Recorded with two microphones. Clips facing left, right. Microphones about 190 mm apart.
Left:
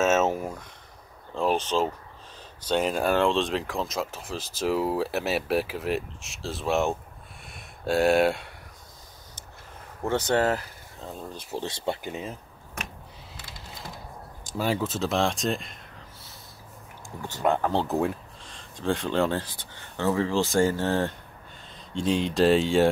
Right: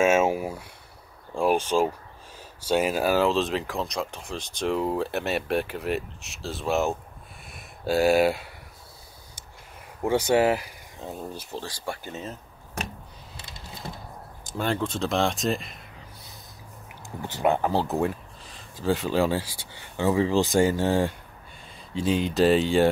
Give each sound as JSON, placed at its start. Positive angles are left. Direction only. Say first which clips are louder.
{"t": 0.0, "sound": "a sound", "louder": "right 2 dB", "side_deg": -10}
{"t": 1.3, "sound": "speech", "louder": "right 2 dB", "side_deg": -10}
{"t": 10.0, "sound": "speech", "louder": "right 3 dB", "side_deg": -10}
{"t": 11.5, "sound": "speech", "louder": "left 7 dB", "side_deg": 20}
{"t": 14.6, "sound": "speech", "louder": "even", "side_deg": 5}
{"t": 17.3, "sound": "speech", "louder": "right 1 dB", "side_deg": -10}
{"t": 21.9, "sound": "speech", "louder": "right 1 dB", "side_deg": 0}